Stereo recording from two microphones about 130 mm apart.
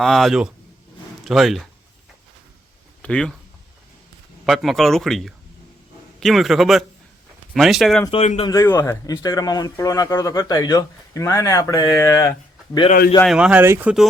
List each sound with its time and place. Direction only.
0.0 s speech: centre (ahead or behind)
3.0 s speech: 5° left (ahead or behind)
4.4 s speech: centre (ahead or behind)
8.1 s a man's voice: 50° left (ahead or behind)
8.4 s speech: 25° left (ahead or behind)
13.2 s speech: 5° right (ahead or behind)